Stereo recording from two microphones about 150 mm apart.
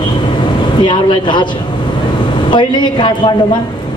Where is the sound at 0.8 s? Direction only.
30° left (ahead or behind).